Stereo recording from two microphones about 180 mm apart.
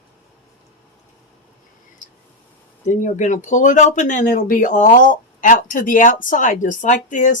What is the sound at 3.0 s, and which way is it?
Speech, 45° left (ahead or behind).